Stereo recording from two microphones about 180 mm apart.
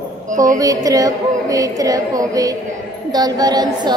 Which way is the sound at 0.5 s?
20° right (ahead or behind).